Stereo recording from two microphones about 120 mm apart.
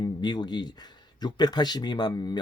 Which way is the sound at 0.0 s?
35° left (ahead or behind).